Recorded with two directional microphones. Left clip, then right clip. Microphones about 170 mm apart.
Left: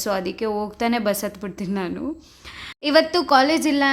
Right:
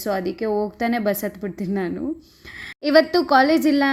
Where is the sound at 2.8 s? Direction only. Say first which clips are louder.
Right 1 dB; 20° right (ahead or behind).